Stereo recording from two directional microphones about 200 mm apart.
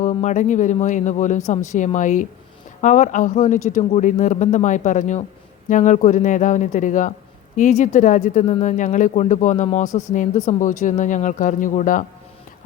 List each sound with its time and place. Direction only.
0.0 s speech: 35° left (ahead or behind)